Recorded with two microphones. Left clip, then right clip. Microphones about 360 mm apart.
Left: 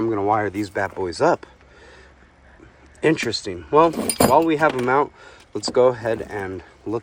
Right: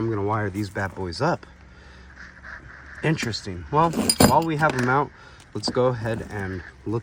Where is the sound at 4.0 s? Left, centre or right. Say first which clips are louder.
Even; centre.